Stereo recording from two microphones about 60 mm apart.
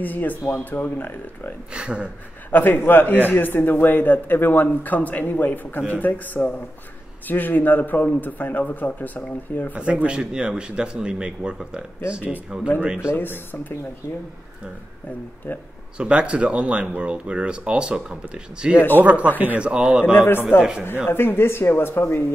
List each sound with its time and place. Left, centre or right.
0.0 s speech: left
1.7 s speech: centre
2.5 s speech: left
9.7 s speech: right
13.1 s speech: left
16.0 s speech: centre
20.1 s speech: left